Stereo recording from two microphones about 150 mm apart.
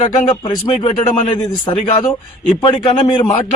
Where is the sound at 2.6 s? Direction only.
30° left (ahead or behind).